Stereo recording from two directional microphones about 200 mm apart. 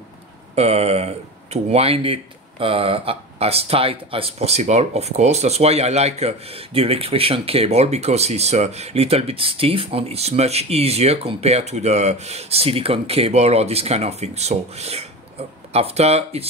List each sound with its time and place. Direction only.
0.6 s speech: 30° right (ahead or behind)